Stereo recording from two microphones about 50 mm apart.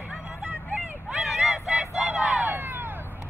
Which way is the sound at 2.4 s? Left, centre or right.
Right.